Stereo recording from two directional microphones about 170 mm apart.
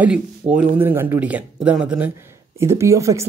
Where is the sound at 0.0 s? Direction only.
5° right (ahead or behind).